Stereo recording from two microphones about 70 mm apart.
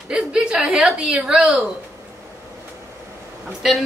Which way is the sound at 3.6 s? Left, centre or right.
Centre.